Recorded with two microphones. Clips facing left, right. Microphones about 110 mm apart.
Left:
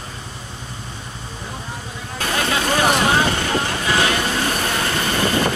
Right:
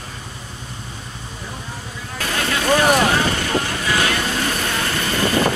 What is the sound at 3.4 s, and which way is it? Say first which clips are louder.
Boat: even; 30° left (ahead or behind).